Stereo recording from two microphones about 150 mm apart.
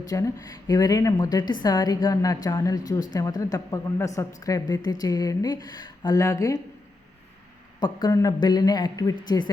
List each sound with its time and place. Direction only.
0.1 s a woman's voice: 20° left (ahead or behind)
7.8 s a woman's voice: 30° left (ahead or behind)